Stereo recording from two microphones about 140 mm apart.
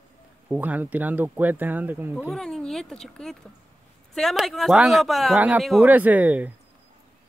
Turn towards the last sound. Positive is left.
turn(degrees=-10)  # may be behind; listen again after turning